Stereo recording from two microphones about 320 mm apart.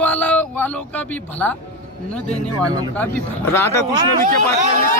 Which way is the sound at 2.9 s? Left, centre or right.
Centre.